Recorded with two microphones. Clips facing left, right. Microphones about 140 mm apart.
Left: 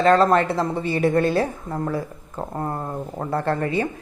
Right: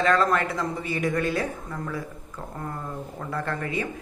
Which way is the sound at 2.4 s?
40° left (ahead or behind).